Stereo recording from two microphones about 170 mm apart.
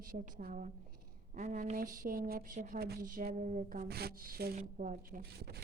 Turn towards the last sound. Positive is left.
turn(degrees=-70)  # may be behind; listen again after turning